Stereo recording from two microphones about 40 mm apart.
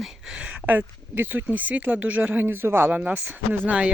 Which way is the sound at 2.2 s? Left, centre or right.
Right.